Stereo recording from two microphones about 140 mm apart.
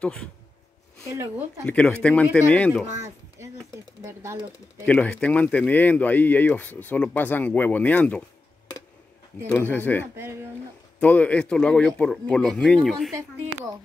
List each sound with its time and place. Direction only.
0.0 s speech: 10° left (ahead or behind)
1.7 s speech: 10° left (ahead or behind)
4.0 s speech: 20° right (ahead or behind)
4.8 s speech: 10° left (ahead or behind)
9.5 s speech: 10° left (ahead or behind)
10.1 s speech: 20° right (ahead or behind)
11.0 s speech: 10° left (ahead or behind)